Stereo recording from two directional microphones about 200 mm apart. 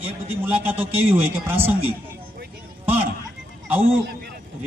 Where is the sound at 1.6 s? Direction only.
30° right (ahead or behind).